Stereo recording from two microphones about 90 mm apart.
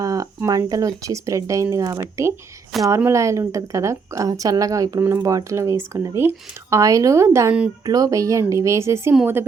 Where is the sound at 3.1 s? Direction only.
35° right (ahead or behind).